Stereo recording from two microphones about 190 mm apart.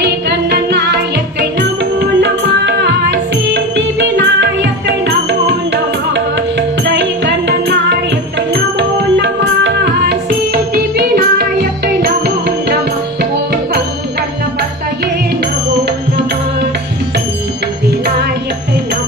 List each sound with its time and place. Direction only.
0.0 s music: 60° right (ahead or behind)